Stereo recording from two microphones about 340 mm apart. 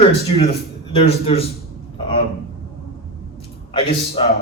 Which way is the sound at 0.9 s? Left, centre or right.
Centre.